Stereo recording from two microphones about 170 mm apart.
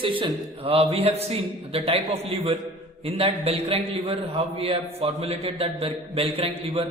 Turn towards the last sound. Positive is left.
turn(degrees=-35)  # may be behind; listen again after turning